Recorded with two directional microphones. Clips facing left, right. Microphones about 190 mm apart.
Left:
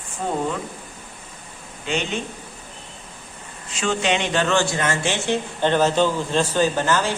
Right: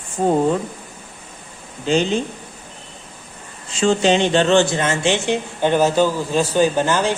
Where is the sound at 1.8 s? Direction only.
35° right (ahead or behind).